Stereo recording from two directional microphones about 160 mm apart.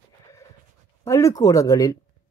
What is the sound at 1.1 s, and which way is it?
Speech, 20° left (ahead or behind).